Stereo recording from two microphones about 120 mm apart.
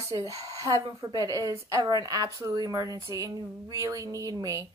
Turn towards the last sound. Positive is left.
turn(degrees=-30)  # may be behind; listen again after turning